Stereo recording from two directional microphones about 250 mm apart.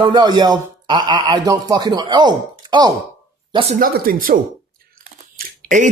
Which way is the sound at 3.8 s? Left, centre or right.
Right.